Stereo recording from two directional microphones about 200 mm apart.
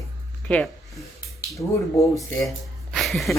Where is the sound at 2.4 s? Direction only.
Centre (ahead or behind).